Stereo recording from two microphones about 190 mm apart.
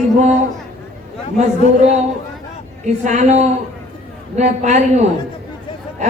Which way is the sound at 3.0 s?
40° right (ahead or behind).